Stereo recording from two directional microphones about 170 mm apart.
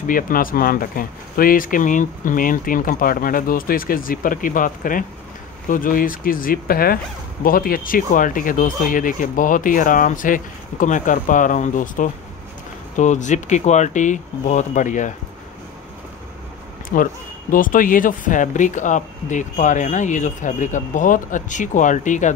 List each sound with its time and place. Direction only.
0.0 s speech: 55° left (ahead or behind)
16.9 s speech: 55° left (ahead or behind)